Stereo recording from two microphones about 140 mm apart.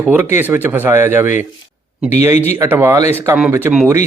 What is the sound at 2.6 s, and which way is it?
Speech, 15° right (ahead or behind).